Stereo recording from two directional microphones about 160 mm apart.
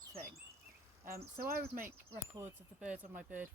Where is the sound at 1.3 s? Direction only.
60° right (ahead or behind).